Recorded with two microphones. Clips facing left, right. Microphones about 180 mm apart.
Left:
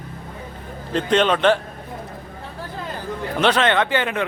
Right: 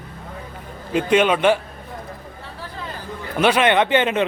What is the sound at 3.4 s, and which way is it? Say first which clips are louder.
Speech: right 2 dB; 10° right (ahead or behind).